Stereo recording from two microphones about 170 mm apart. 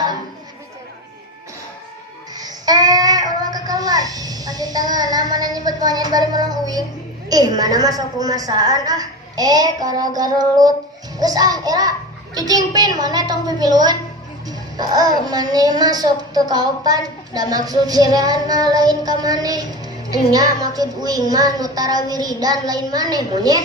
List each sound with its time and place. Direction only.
2.3 s child singing: 25° right (ahead or behind)
7.3 s a woman's voice: 20° right (ahead or behind)